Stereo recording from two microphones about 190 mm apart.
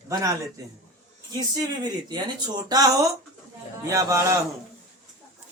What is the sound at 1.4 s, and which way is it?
A man's voice, 20° right (ahead or behind).